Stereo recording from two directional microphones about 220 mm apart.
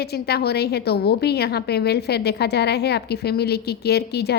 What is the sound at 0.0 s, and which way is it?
A woman's voice, 45° left (ahead or behind).